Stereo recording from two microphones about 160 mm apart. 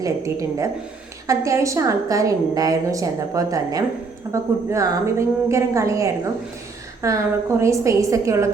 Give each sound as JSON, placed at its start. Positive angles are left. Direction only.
{"t": 0.0, "sound": "a woman's voice", "side_deg": -20}